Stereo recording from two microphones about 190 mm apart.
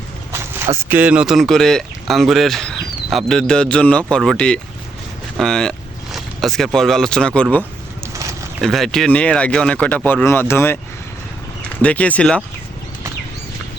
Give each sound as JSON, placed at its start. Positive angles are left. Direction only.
{"t": 0.3, "sound": "speech", "side_deg": -15}
{"t": 8.0, "sound": "a sound", "side_deg": -15}
{"t": 8.6, "sound": "speech", "side_deg": 0}
{"t": 11.8, "sound": "speech", "side_deg": 5}